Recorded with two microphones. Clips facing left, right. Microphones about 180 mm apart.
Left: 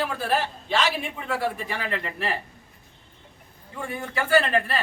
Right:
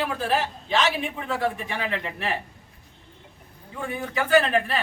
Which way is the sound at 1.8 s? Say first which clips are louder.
Right 1 dB; 15° right (ahead or behind).